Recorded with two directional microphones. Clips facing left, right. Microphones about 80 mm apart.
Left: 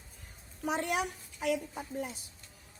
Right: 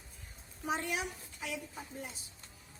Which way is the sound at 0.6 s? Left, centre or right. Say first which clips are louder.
Left 4 dB; left.